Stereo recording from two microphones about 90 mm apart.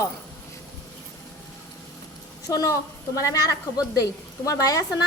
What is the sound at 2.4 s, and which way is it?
A woman's voice, 40° left (ahead or behind).